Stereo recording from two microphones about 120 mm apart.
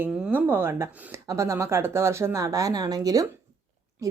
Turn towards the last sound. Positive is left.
turn(degrees=-30)  # may be behind; listen again after turning